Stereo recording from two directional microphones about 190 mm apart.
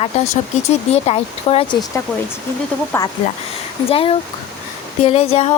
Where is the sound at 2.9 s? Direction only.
10° left (ahead or behind).